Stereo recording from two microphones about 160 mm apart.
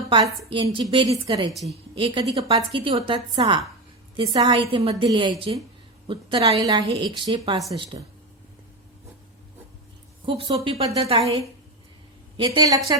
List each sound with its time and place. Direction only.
0.5 s a woman's voice: 30° right (ahead or behind)
6.6 s speech: 20° right (ahead or behind)
10.2 s a woman's voice: 35° right (ahead or behind)
12.4 s speech: 25° right (ahead or behind)